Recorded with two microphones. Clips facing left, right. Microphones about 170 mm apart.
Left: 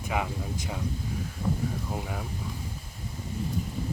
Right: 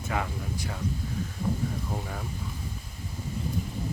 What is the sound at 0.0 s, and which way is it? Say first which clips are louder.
Speech: left 1 dB; 15° left (ahead or behind).